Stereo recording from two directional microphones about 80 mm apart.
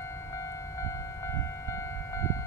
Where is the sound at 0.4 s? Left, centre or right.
Left.